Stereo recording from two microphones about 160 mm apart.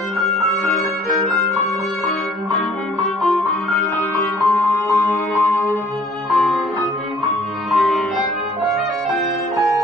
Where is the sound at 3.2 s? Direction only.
Centre (ahead or behind).